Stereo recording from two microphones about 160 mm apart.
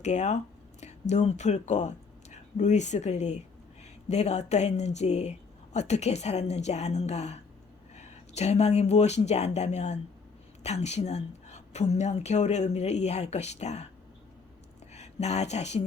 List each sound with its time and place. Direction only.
0.0 s a woman's voice: 45° left (ahead or behind)
14.9 s speech: 45° left (ahead or behind)